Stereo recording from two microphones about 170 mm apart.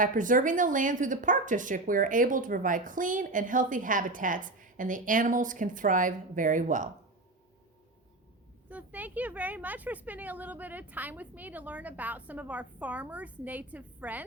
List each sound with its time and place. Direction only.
0.0 s a woman's voice: 50° right (ahead or behind)
8.7 s speech: 10° right (ahead or behind)